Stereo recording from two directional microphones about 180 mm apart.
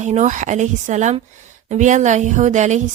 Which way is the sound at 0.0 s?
40° right (ahead or behind).